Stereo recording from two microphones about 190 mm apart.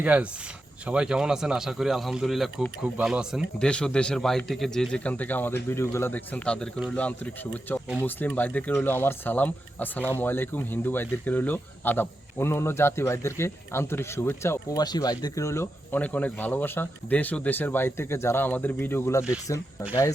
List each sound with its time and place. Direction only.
0.0 s speech: 5° right (ahead or behind); by 19.9 s 15° left (ahead or behind)